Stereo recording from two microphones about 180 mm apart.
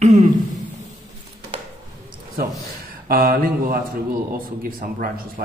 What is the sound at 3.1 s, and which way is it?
A man's voice, 55° right (ahead or behind).